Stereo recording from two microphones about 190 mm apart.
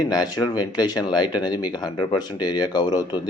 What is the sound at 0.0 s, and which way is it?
Speech, 20° left (ahead or behind).